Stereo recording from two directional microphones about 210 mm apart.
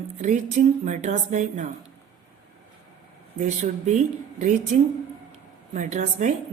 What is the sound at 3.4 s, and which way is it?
Speech, 35° right (ahead or behind).